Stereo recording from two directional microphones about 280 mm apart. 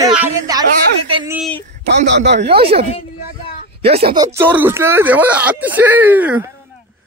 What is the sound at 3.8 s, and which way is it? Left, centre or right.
Speech, centre.